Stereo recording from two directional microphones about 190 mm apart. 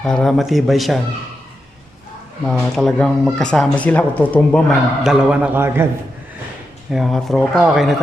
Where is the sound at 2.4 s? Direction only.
Centre (ahead or behind).